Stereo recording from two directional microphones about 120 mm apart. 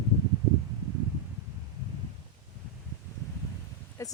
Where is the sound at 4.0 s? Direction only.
25° left (ahead or behind).